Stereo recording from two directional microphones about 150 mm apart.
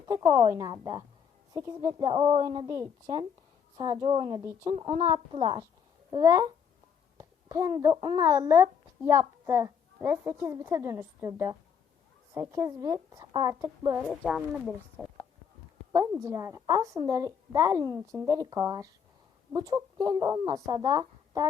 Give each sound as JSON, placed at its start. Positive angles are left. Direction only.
{"t": 0.0, "sound": "a child's voice", "side_deg": -30}
{"t": 3.8, "sound": "a woman's voice", "side_deg": -30}
{"t": 14.0, "sound": "speech", "side_deg": -5}
{"t": 16.2, "sound": "a child's voice", "side_deg": -20}